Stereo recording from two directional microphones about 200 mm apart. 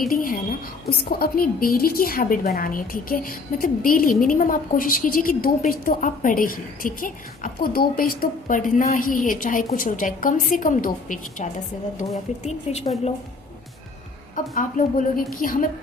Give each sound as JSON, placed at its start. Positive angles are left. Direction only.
{"t": 0.9, "sound": "a woman's voice", "side_deg": 50}
{"t": 14.5, "sound": "a woman's voice", "side_deg": 45}